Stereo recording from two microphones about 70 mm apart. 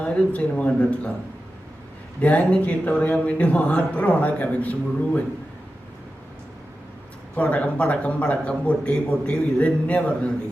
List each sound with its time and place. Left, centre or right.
0.0 s speech: centre
2.2 s speech: centre
7.3 s speech: left